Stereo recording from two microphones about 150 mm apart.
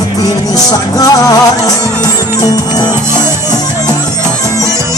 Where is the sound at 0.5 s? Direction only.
25° left (ahead or behind).